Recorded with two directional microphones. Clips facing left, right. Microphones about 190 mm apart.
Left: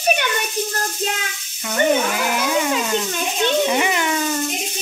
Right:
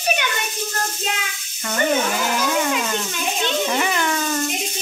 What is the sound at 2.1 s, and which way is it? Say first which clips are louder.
Speech: even; 10° left (ahead or behind).